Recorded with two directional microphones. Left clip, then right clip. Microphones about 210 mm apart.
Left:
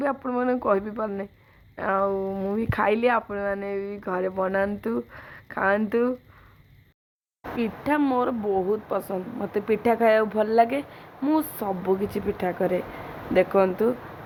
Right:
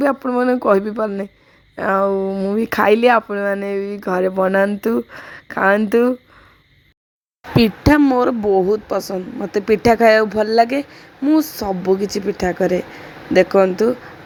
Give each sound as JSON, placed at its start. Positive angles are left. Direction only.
{"t": 0.0, "sound": "speech", "side_deg": -50}
{"t": 7.5, "sound": "speech", "side_deg": -45}
{"t": 8.0, "sound": "a woman's voice", "side_deg": -35}
{"t": 11.2, "sound": "speech", "side_deg": -20}
{"t": 11.6, "sound": "a woman's voice", "side_deg": -35}